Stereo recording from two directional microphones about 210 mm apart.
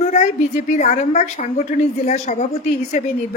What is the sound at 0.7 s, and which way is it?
Speech, 35° left (ahead or behind).